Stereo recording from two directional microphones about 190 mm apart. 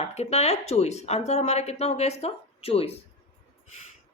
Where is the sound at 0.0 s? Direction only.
35° left (ahead or behind).